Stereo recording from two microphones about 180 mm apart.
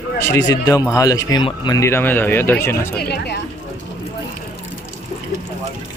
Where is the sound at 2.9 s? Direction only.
60° left (ahead or behind).